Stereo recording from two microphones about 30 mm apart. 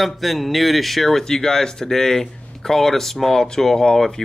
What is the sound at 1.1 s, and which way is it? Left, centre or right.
Speech, centre.